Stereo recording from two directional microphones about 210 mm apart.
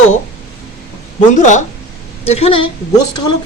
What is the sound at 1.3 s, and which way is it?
A woman's voice, 35° left (ahead or behind).